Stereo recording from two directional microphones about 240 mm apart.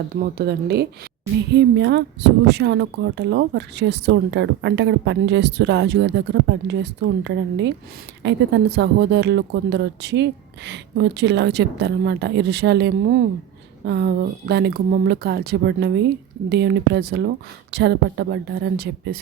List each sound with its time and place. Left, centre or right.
0.2 s speech: right